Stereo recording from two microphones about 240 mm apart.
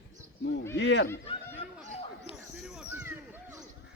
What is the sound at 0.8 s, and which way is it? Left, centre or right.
Speech, left.